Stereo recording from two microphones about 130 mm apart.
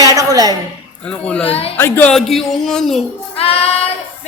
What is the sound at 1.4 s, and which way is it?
Speech, 50° left (ahead or behind).